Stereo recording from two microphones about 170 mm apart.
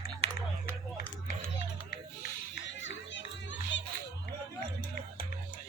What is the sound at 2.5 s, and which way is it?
Music, 90° left.